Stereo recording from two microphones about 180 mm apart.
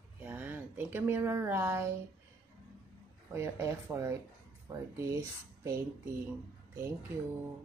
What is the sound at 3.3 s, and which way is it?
Speech, 15° right (ahead or behind).